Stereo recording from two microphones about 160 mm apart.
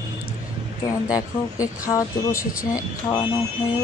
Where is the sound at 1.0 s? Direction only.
20° left (ahead or behind).